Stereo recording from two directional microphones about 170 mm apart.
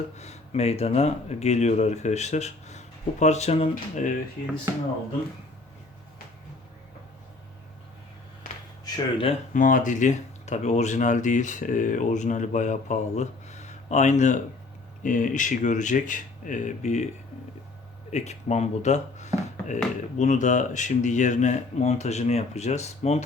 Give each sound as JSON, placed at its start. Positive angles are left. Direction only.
{"t": 0.2, "sound": "speech", "side_deg": 40}
{"t": 4.4, "sound": "speech", "side_deg": 60}
{"t": 8.8, "sound": "speech", "side_deg": 30}
{"t": 9.5, "sound": "speech", "side_deg": 50}
{"t": 18.1, "sound": "speech", "side_deg": 40}